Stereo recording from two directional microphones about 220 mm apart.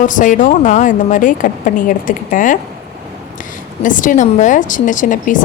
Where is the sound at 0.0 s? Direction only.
35° left (ahead or behind).